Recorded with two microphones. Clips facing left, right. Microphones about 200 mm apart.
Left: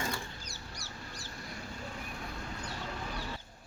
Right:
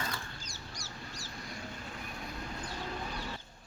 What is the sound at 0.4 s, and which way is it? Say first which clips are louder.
Duck: even; 60° left (ahead or behind).